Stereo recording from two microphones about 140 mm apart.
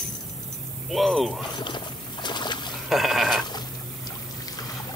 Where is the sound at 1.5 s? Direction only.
35° left (ahead or behind).